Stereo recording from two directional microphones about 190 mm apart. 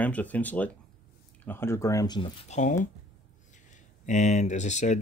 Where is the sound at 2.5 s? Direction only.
40° left (ahead or behind).